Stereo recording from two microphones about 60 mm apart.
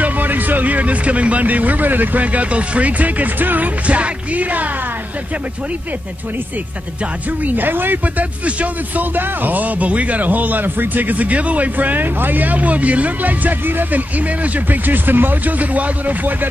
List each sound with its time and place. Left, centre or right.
0.0 s speech: right
7.4 s speech: right